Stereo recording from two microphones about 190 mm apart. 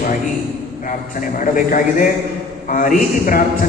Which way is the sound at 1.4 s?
45° left (ahead or behind).